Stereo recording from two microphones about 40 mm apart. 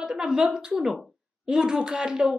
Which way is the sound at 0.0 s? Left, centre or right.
Centre.